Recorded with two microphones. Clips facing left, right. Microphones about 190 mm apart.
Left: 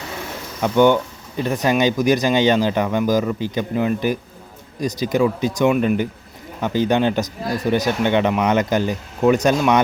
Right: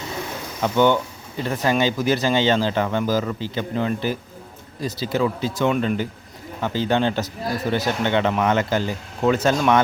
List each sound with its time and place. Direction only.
0.6 s speech: 15° left (ahead or behind)
5.7 s speech: 5° left (ahead or behind)
6.6 s speech: 15° left (ahead or behind)